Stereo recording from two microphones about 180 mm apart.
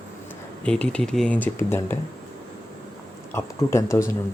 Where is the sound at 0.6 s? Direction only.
5° left (ahead or behind).